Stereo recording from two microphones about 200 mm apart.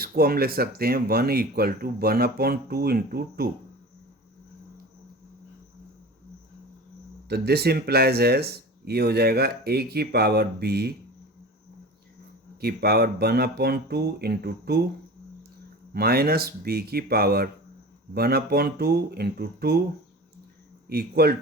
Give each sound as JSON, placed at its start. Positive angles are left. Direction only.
{"t": 0.0, "sound": "speech", "side_deg": -50}
{"t": 7.3, "sound": "speech", "side_deg": -55}
{"t": 12.5, "sound": "speech", "side_deg": -50}
{"t": 15.9, "sound": "speech", "side_deg": -50}
{"t": 20.9, "sound": "speech", "side_deg": -50}